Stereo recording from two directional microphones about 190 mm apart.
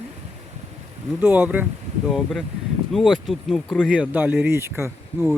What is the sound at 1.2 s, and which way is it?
Speech, 10° right (ahead or behind).